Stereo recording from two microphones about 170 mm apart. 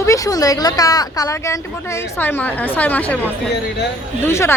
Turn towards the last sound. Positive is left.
turn(degrees=15)  # may be behind; listen again after turning